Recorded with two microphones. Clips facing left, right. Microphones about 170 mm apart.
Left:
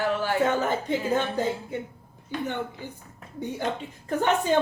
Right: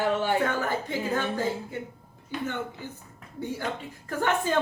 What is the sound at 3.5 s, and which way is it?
Speech, 20° left (ahead or behind).